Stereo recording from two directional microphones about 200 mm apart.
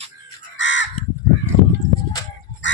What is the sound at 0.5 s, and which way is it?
Crow, 65° left (ahead or behind).